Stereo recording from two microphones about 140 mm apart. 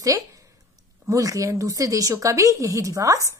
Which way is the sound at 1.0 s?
25° right (ahead or behind).